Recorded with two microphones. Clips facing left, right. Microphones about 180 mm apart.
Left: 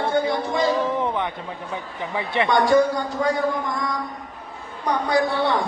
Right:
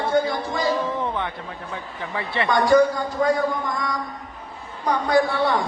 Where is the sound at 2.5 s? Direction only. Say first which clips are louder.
Right 1 dB; centre (ahead or behind).